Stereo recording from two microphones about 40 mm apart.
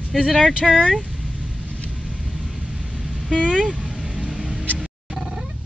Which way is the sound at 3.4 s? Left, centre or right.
Right.